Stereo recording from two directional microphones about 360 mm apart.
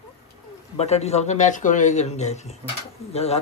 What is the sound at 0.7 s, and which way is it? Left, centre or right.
A man's voice, centre.